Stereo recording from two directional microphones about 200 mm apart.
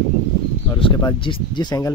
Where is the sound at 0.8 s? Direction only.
25° left (ahead or behind).